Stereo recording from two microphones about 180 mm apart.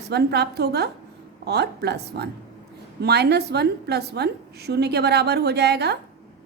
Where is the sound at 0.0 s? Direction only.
65° right (ahead or behind).